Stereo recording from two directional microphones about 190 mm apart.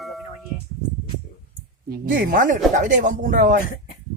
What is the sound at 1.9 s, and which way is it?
Speech, 45° right (ahead or behind).